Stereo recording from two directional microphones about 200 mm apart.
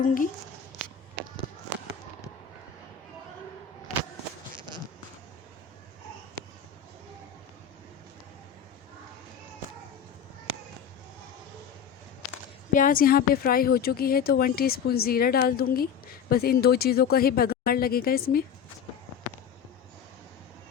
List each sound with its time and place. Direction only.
0.0 s speech: 45° left (ahead or behind)
12.7 s speech: 45° left (ahead or behind)